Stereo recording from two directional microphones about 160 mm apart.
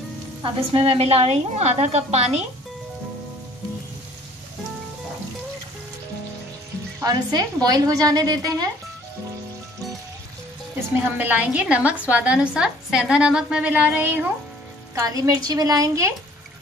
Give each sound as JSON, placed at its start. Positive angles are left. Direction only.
{"t": 0.4, "sound": "a woman's voice", "side_deg": -35}
{"t": 7.0, "sound": "a woman's voice", "side_deg": -25}
{"t": 11.1, "sound": "a woman's voice", "side_deg": -10}
{"t": 15.0, "sound": "a woman's voice", "side_deg": -20}